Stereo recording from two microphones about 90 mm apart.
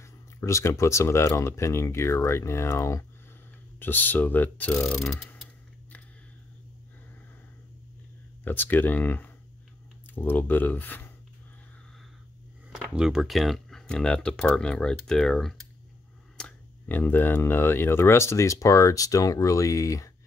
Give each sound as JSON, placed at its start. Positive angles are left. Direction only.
{"t": 0.0, "sound": "speech", "side_deg": 30}
{"t": 3.8, "sound": "speech", "side_deg": 20}
{"t": 4.9, "sound": "speech", "side_deg": 5}
{"t": 8.5, "sound": "speech", "side_deg": 20}
{"t": 12.6, "sound": "speech", "side_deg": -10}